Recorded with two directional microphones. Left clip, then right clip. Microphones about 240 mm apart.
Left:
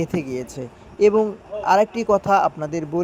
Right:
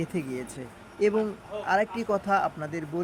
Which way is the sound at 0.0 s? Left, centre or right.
Centre.